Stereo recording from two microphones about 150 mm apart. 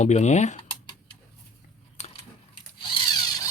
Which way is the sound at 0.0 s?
50° left (ahead or behind).